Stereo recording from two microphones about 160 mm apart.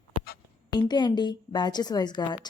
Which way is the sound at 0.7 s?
25° left (ahead or behind).